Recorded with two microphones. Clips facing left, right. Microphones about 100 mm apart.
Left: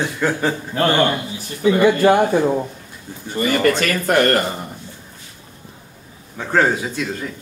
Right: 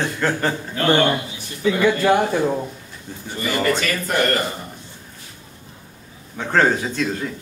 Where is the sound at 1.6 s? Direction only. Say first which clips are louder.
Left 4 dB; 20° left (ahead or behind).